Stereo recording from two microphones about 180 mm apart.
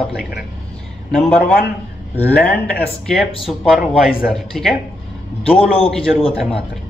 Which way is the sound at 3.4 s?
Centre (ahead or behind).